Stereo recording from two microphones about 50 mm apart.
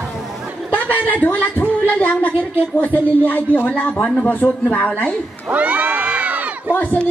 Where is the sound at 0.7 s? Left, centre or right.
Left.